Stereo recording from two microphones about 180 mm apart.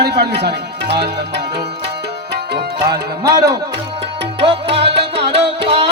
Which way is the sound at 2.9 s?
20° right (ahead or behind).